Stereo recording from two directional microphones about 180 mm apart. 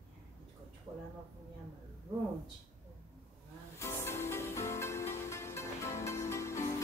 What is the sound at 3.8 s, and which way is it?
Music, 15° left (ahead or behind).